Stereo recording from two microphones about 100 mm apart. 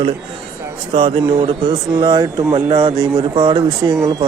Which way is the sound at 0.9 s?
55° right (ahead or behind).